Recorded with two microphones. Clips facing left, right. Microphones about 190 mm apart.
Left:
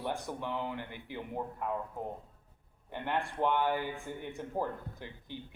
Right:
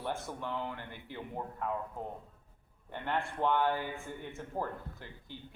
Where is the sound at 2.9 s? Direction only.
15° left (ahead or behind).